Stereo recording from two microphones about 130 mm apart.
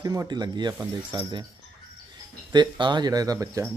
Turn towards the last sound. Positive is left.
turn(degrees=-25)  # may be behind; listen again after turning